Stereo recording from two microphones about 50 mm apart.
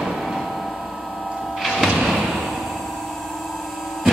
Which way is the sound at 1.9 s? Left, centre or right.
Centre.